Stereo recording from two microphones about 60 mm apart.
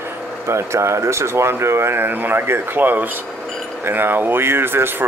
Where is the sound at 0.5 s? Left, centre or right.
Right.